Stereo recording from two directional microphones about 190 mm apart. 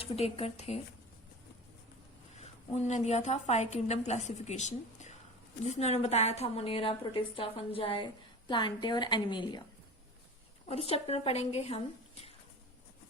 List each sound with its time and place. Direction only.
0.0 s a woman's voice: 30° left (ahead or behind)
2.7 s a woman's voice: 35° left (ahead or behind)
10.7 s a woman's voice: 30° left (ahead or behind)